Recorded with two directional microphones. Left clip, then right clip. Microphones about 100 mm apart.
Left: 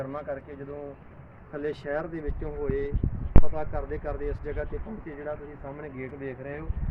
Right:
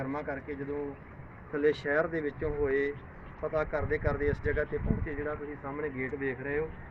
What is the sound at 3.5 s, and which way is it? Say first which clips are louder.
Speech: right 3 dB; 15° left (ahead or behind).